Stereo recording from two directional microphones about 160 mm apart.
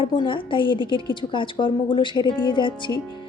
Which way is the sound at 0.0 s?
30° left (ahead or behind).